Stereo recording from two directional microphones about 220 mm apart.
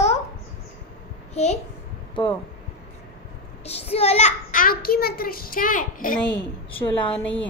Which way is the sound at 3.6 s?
25° left (ahead or behind).